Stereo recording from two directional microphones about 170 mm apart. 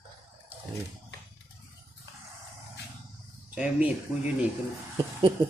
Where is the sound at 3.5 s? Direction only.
10° right (ahead or behind).